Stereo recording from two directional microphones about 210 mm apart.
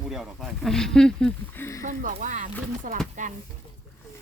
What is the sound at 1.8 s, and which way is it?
Speech, 40° right (ahead or behind).